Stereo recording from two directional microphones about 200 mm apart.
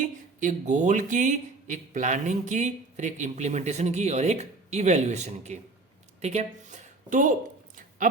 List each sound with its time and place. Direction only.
0.0 s speech: 40° right (ahead or behind)